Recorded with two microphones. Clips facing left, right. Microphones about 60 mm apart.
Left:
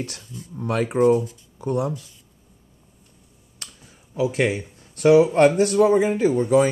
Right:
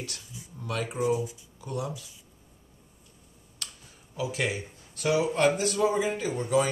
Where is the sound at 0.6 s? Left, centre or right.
Left.